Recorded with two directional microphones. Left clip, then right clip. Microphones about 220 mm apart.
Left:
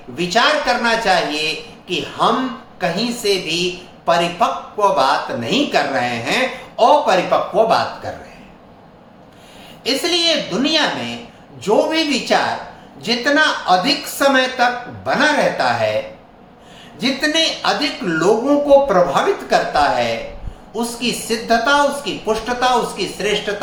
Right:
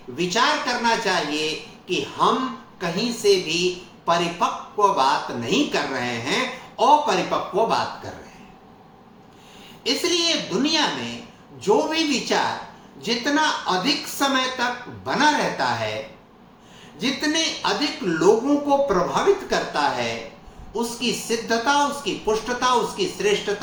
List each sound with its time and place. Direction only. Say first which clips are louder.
0.2 s speech: left 5 dB; 15° left (ahead or behind)
9.8 s speech: left 5 dB; 15° left (ahead or behind)
17.0 s speech: left 6 dB; 15° left (ahead or behind)